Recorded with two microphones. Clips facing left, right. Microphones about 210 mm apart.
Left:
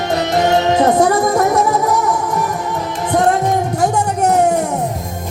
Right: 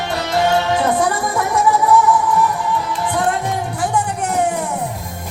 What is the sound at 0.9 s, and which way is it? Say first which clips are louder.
Music: left 5 dB; 40° left (ahead or behind).